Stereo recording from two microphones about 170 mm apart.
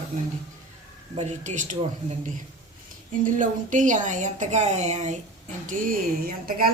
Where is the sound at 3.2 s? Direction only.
50° right (ahead or behind).